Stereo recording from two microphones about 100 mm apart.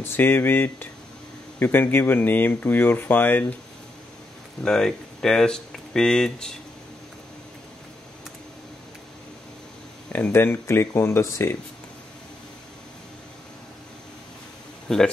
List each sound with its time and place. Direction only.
0.0 s speech: 20° left (ahead or behind)
4.6 s speech: 5° left (ahead or behind)
10.1 s speech: 20° left (ahead or behind)
14.9 s speech: 5° left (ahead or behind)